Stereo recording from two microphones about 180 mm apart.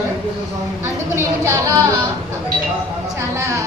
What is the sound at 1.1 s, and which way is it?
Speech, 15° right (ahead or behind).